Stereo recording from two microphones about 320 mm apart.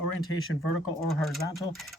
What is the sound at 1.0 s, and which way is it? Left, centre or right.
Speech, centre.